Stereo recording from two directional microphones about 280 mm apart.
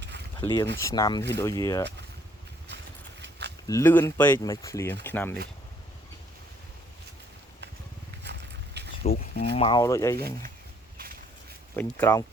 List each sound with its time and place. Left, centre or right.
0.3 s speech: centre
3.2 s a sound: right
3.7 s speech: centre
8.2 s a sound: right
9.0 s a sound: left
9.6 s speech: centre
10.2 s speech: right
10.9 s walk: right
11.8 s speech: centre